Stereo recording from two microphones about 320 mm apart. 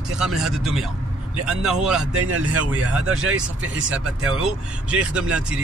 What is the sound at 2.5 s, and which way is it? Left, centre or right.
Speech, right.